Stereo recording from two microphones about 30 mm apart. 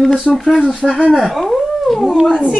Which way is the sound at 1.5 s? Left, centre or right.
Centre.